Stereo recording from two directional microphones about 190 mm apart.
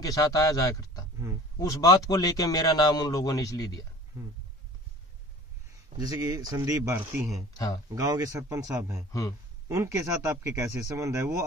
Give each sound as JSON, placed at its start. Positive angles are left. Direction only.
{"t": 0.0, "sound": "speech", "side_deg": 20}
{"t": 5.9, "sound": "speech", "side_deg": -20}
{"t": 7.5, "sound": "speech", "side_deg": 20}
{"t": 7.9, "sound": "speech", "side_deg": -15}